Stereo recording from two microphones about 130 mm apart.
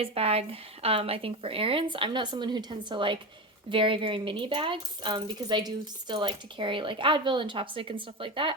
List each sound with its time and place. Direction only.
0.0 s speech: 50° right (ahead or behind)